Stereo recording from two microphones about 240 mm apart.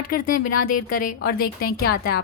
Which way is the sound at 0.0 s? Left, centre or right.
Left.